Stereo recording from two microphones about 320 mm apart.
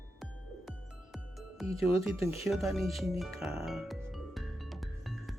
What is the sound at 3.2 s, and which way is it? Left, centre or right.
Music, centre.